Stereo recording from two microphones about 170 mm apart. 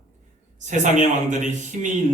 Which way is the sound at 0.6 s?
45° right (ahead or behind).